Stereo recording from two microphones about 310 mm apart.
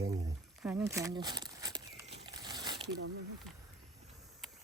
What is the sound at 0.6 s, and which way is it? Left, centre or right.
Speech, centre.